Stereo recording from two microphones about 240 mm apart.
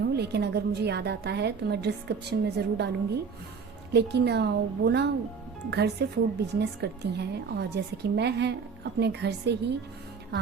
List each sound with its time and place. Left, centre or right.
0.0 s speech: right